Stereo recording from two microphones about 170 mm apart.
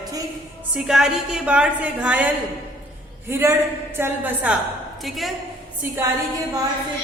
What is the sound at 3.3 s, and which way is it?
A woman's voice, 15° right (ahead or behind).